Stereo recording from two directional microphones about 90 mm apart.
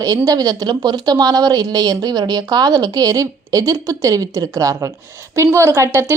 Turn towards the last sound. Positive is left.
turn(degrees=-30)  # may be behind; listen again after turning